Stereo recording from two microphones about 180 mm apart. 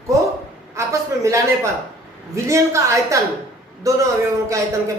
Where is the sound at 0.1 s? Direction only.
15° right (ahead or behind).